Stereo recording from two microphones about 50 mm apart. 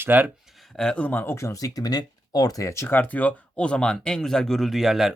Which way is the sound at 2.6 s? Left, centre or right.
Left.